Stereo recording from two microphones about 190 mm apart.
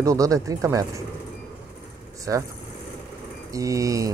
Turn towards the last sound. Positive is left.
turn(degrees=-15)  # may be behind; listen again after turning